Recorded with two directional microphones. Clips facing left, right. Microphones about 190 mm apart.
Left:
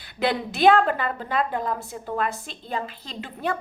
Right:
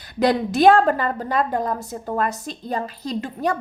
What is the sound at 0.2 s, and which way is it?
A woman's voice, 40° right (ahead or behind).